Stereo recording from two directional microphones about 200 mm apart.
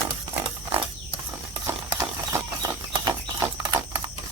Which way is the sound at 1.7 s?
15° right (ahead or behind).